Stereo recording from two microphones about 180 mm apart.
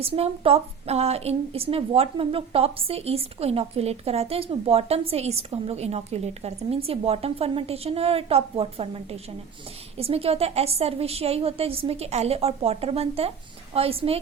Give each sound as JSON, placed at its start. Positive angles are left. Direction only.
{"t": 0.0, "sound": "a woman's voice", "side_deg": -35}